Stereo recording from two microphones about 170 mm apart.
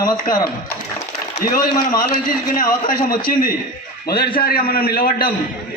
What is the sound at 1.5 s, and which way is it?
Speech, 25° left (ahead or behind).